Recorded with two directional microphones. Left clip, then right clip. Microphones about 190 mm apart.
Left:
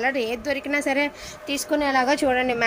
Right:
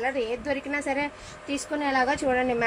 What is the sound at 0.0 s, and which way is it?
A woman's voice, 50° left (ahead or behind).